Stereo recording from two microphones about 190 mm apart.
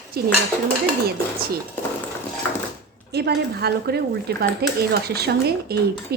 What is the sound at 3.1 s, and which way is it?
A woman's voice, 60° right (ahead or behind).